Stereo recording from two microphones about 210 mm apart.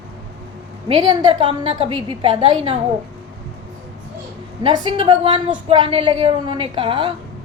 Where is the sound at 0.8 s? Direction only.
20° right (ahead or behind).